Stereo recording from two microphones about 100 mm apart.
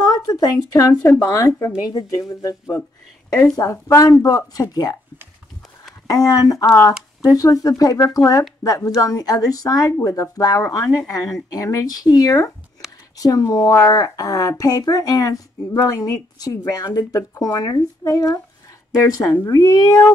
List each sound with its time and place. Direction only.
0.1 s a woman's voice: 40° left (ahead or behind)
6.0 s a woman's voice: 35° left (ahead or behind)